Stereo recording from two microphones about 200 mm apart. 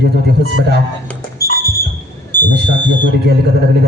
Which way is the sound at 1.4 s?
15° left (ahead or behind).